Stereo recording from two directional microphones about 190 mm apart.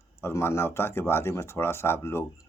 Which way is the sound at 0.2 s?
15° left (ahead or behind).